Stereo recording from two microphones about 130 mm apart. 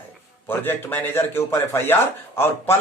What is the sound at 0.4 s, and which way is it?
A man's voice, 15° left (ahead or behind).